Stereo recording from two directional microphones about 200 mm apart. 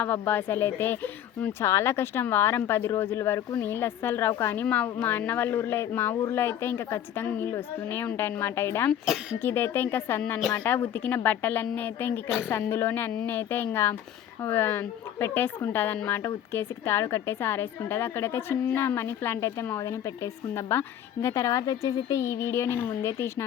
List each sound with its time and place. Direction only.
0.0 s speech: 10° left (ahead or behind)